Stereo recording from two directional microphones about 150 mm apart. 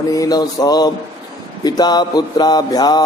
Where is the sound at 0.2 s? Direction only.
25° left (ahead or behind).